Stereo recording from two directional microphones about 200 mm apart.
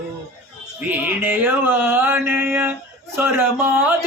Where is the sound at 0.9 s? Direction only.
10° right (ahead or behind).